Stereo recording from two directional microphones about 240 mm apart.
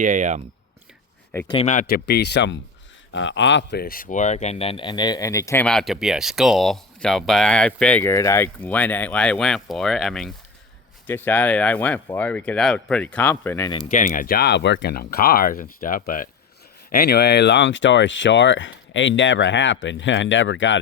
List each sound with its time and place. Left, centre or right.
0.0 s speech: right
1.3 s speech: centre
1.5 s speech: left; by 13.7 s centre
13.8 s speech: left